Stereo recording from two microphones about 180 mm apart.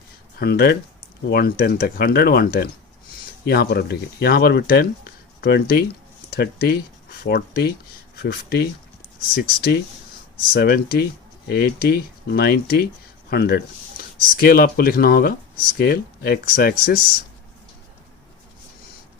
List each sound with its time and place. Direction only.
0.3 s speech: 60° left (ahead or behind)